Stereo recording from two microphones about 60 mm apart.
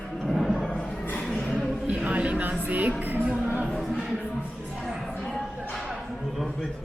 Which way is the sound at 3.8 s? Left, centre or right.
Centre.